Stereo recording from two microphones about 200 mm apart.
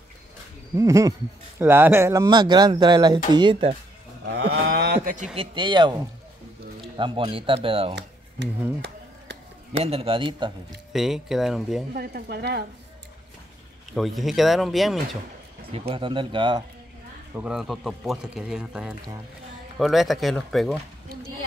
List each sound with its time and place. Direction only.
0.7 s speech: 15° right (ahead or behind)
4.3 s speech: 60° right (ahead or behind); by 7.9 s 30° right (ahead or behind)
7.9 s a sound: 60° right (ahead or behind)
9.7 s speech: 30° right (ahead or behind)
10.9 s speech: centre (ahead or behind)
11.9 s speech: 50° right (ahead or behind)
13.9 s speech: centre (ahead or behind)
15.9 s speech: 25° right (ahead or behind)
17.4 s speech: centre (ahead or behind)